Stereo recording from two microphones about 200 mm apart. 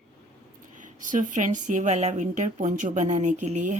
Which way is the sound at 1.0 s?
40° right (ahead or behind).